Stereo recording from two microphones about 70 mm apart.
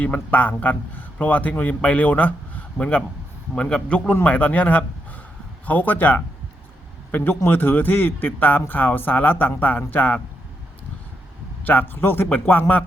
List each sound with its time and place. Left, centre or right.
0.0 s a man's voice: left
11.6 s speech: left